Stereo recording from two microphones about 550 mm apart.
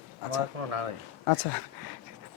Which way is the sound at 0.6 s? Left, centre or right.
Right.